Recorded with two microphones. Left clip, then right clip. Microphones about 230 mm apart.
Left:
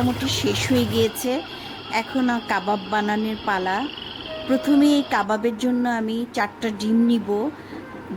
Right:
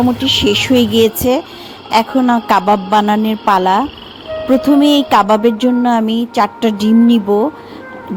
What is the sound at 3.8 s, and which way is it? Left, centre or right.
Frog, centre.